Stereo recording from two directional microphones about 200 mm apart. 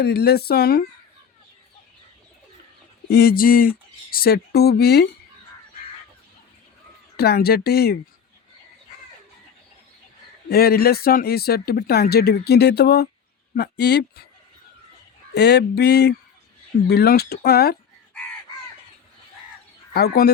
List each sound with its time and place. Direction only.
0.0 s speech: 55° left (ahead or behind)
3.1 s speech: 50° left (ahead or behind)
7.2 s speech: 50° left (ahead or behind)
10.5 s speech: 50° left (ahead or behind)
13.6 s a sound: 55° left (ahead or behind)
15.3 s a sound: 55° left (ahead or behind)
16.9 s speech: 55° left (ahead or behind)
19.9 s speech: 50° left (ahead or behind)